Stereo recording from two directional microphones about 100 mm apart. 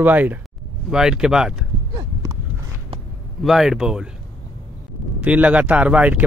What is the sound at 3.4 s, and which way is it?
Speech, 5° right (ahead or behind).